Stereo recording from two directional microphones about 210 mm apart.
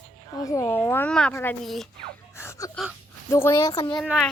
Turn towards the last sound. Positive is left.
turn(degrees=0)  # may be behind; listen again after turning